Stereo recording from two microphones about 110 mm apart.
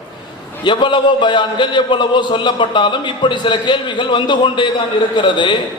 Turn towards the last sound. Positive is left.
turn(degrees=45)  # may be behind; listen again after turning